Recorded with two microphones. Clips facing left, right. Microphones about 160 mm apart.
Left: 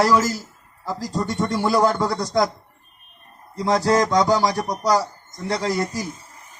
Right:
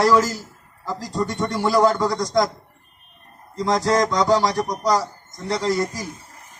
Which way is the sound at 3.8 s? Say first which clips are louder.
Left 1 dB; 5° left (ahead or behind).